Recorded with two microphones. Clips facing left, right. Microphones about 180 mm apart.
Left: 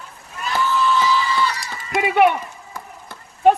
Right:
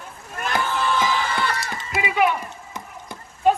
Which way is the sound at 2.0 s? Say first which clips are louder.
Left 5 dB; 60° left (ahead or behind).